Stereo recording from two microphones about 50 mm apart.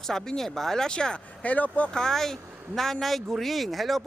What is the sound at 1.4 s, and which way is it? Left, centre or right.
Speech, left.